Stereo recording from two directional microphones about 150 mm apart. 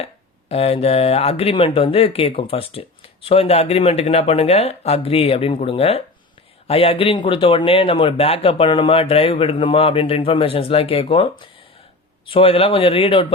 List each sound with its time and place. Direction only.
0.0 s speech: 45° left (ahead or behind)